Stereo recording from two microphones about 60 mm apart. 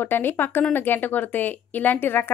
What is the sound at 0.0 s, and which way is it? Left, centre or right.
A woman's voice, left.